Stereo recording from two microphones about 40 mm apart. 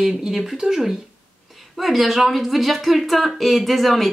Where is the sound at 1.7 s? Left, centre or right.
Centre.